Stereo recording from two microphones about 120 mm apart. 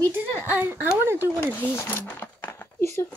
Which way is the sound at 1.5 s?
20° left (ahead or behind).